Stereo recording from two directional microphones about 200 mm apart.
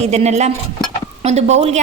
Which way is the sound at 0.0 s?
35° right (ahead or behind).